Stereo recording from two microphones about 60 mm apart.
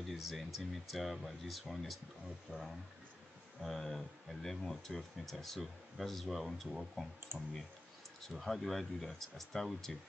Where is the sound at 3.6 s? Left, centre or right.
Centre.